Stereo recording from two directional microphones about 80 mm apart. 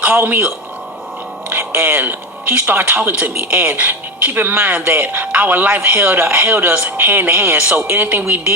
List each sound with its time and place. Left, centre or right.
0.0 s speech: right
1.5 s speech: right